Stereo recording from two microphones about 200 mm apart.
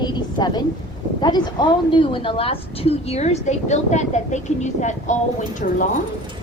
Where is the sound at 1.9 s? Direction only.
25° left (ahead or behind).